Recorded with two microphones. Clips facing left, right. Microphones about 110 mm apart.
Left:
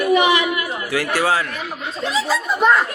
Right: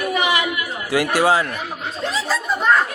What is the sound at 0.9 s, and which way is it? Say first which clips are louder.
Speech: right 3 dB; 20° right (ahead or behind).